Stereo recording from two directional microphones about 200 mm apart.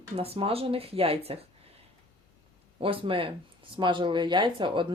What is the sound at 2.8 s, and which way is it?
Speech, 25° right (ahead or behind).